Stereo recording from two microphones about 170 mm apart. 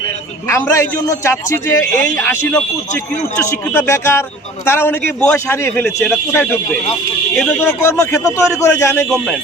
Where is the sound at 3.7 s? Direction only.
15° left (ahead or behind).